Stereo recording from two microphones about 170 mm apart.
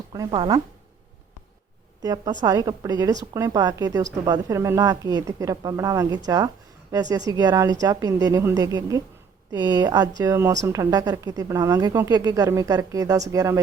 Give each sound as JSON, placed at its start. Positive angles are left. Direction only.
{"t": 0.1, "sound": "a woman's voice", "side_deg": -25}
{"t": 2.0, "sound": "a woman's voice", "side_deg": -20}